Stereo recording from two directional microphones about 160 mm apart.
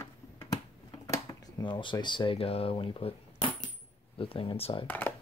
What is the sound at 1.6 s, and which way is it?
Speech, 30° left (ahead or behind).